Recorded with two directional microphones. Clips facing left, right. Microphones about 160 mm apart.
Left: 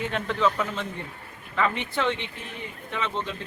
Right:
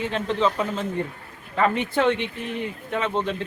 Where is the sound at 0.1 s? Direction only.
30° right (ahead or behind).